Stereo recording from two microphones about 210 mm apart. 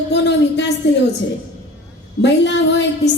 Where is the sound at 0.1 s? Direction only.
55° left (ahead or behind).